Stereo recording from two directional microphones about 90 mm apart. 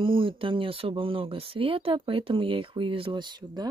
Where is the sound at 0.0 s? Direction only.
75° right (ahead or behind).